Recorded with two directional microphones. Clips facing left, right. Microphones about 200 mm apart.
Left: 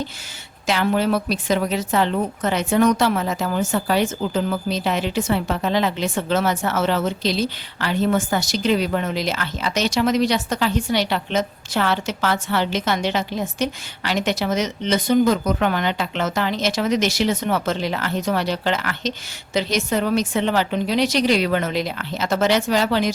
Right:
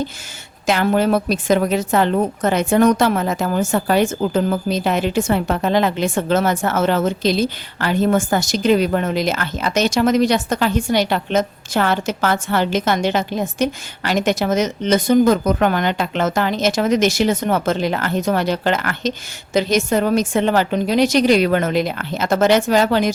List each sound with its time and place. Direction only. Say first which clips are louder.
0.7 s a woman's voice: right 3 dB; 50° right (ahead or behind)